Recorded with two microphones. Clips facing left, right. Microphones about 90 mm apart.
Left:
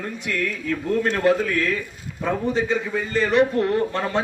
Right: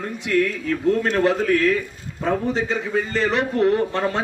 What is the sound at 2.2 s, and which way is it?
A man's voice, 30° right (ahead or behind).